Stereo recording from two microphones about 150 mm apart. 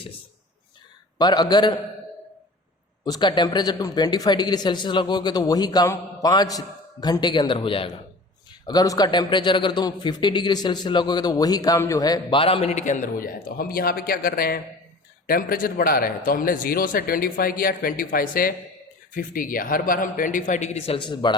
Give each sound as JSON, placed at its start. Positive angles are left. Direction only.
{"t": 1.2, "sound": "speech", "side_deg": 30}
{"t": 3.0, "sound": "speech", "side_deg": 30}
{"t": 8.6, "sound": "a man's voice", "side_deg": 25}